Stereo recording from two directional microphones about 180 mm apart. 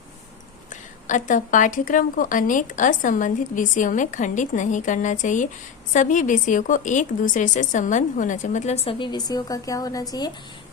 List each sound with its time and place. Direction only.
1.0 s a woman's voice: 45° left (ahead or behind); by 10.3 s 20° left (ahead or behind)